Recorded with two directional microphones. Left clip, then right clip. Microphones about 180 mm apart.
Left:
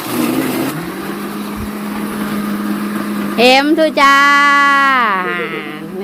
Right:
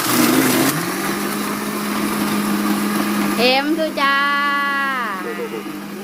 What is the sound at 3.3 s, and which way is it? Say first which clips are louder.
Music: left 8 dB; 30° left (ahead or behind).